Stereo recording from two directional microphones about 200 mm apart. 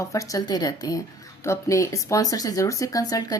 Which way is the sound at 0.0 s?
15° left (ahead or behind).